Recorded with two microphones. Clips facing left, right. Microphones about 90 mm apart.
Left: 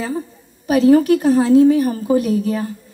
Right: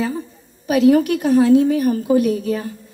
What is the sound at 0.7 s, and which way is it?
A woman's voice, 35° left (ahead or behind).